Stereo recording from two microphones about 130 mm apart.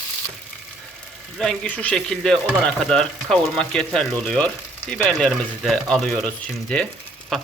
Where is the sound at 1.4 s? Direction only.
10° left (ahead or behind).